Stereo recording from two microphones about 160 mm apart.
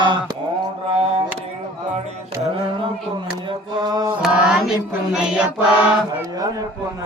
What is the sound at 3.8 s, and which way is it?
Chant, 25° right (ahead or behind).